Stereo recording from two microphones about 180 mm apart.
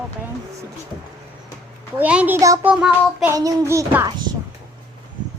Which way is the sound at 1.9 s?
10° right (ahead or behind).